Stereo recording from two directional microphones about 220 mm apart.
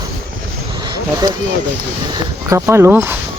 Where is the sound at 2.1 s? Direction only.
15° right (ahead or behind).